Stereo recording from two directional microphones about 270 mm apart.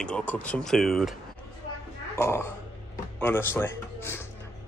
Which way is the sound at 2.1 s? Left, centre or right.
Centre.